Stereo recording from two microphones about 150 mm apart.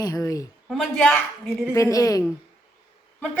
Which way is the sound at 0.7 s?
5° left (ahead or behind).